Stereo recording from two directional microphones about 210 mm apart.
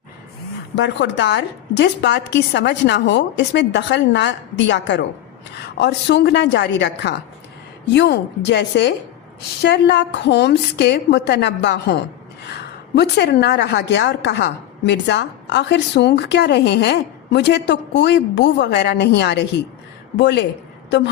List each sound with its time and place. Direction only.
0.8 s a woman's voice: 60° left (ahead or behind)